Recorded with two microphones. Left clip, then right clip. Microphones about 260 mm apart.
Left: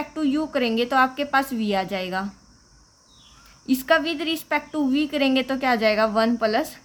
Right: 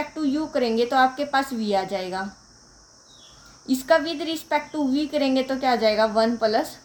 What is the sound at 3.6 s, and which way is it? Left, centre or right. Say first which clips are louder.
Speech: left 1 dB; left.